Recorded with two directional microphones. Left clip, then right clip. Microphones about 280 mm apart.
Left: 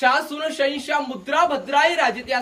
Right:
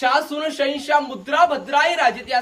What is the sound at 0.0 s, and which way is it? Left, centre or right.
A man's voice, centre.